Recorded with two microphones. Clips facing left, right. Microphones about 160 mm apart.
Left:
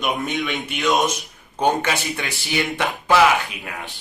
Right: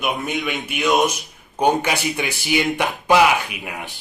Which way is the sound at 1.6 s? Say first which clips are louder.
Right 2 dB; 10° right (ahead or behind).